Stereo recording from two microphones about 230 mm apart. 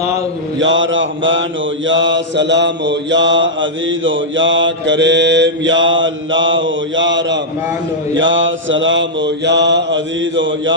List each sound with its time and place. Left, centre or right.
0.6 s mantra: right